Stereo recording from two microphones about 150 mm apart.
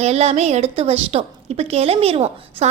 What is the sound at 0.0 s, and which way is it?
A woman's voice, 45° right (ahead or behind).